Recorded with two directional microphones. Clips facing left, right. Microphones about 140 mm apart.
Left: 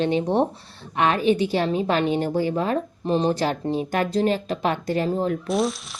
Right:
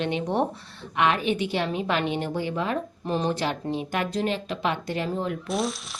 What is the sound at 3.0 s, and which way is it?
Speech, 25° left (ahead or behind).